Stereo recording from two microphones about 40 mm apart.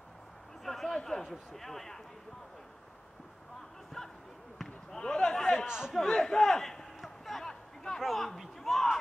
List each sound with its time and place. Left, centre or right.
0.7 s a man's voice: centre
4.6 s basketball bounce: centre
5.7 s a man's voice: centre
5.9 s a sound: centre